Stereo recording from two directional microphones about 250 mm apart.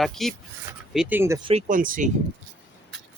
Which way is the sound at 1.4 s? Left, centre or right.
Right.